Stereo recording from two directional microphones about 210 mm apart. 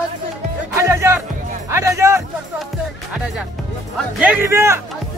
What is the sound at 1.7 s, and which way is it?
Speech, 15° right (ahead or behind).